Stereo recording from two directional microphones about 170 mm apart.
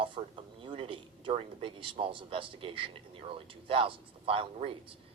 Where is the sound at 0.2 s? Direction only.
30° right (ahead or behind).